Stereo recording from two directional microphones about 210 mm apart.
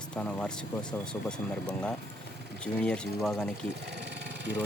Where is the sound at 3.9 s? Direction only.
55° right (ahead or behind).